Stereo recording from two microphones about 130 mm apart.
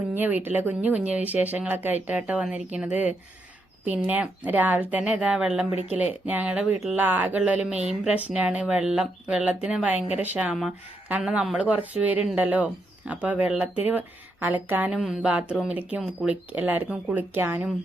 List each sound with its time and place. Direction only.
0.1 s speech: 15° right (ahead or behind)
4.1 s speech: 15° right (ahead or behind)